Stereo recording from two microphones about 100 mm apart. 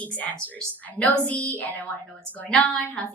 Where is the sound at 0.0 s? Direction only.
15° left (ahead or behind).